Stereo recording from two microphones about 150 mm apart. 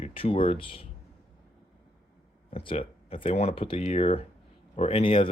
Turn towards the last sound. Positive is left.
turn(degrees=35)  # may be behind; listen again after turning